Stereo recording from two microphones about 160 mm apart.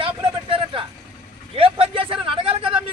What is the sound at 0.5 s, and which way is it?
Vehicle, 35° right (ahead or behind).